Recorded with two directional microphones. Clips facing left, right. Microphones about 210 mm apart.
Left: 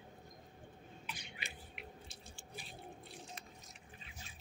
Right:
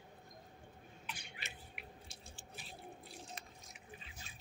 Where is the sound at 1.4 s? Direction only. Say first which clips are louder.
Left 2 dB; 5° right (ahead or behind).